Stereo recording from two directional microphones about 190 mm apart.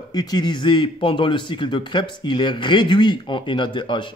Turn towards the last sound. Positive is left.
turn(degrees=25)  # may be behind; listen again after turning